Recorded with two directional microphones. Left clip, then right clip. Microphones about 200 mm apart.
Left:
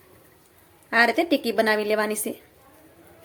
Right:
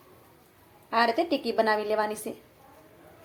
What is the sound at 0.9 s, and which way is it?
A woman's voice, 20° left (ahead or behind).